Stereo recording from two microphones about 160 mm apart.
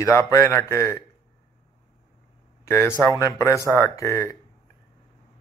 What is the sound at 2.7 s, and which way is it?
A man's voice, 15° left (ahead or behind).